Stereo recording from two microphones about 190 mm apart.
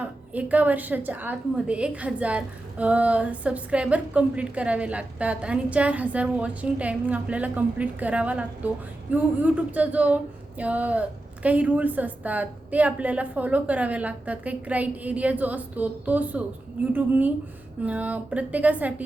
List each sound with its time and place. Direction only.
0.0 s a woman's voice: 10° right (ahead or behind)